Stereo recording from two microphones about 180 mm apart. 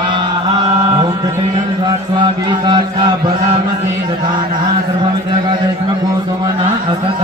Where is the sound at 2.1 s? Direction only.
25° right (ahead or behind).